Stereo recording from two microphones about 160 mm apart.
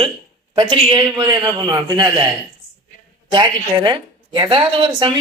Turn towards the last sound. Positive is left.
turn(degrees=-30)  # may be behind; listen again after turning